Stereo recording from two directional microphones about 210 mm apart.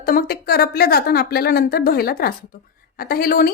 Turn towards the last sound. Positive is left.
turn(degrees=45)  # may be behind; listen again after turning